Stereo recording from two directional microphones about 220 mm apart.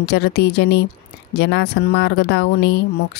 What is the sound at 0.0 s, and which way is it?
Speech, 50° left (ahead or behind).